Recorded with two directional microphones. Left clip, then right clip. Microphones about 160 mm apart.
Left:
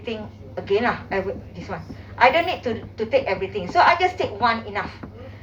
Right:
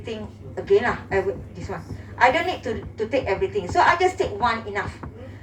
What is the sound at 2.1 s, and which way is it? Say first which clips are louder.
A woman's voice: left 2 dB; 10° left (ahead or behind).